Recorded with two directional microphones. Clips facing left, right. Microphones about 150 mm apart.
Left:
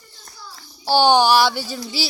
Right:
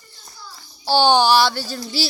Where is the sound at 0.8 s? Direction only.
10° left (ahead or behind).